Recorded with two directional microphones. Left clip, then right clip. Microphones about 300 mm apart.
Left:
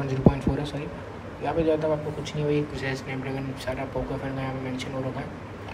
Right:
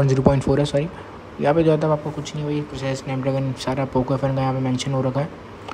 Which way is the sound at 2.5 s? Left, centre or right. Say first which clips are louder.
Right 2 dB; centre.